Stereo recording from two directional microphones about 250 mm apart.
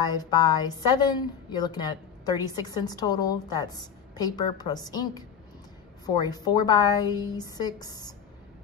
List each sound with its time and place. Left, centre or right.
0.0 s a woman's voice: centre